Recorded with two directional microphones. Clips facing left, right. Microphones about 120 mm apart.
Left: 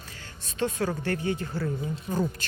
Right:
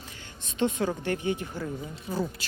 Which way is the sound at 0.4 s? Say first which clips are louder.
Right 1 dB; 20° right (ahead or behind).